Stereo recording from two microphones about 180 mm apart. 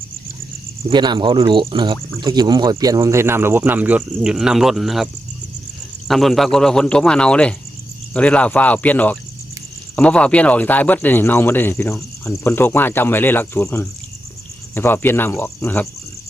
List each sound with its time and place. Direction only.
0.8 s speech: 25° right (ahead or behind); by 5.0 s centre (ahead or behind)
6.1 s speech: centre (ahead or behind)